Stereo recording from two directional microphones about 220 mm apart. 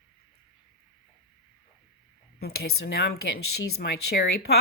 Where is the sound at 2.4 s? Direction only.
45° left (ahead or behind).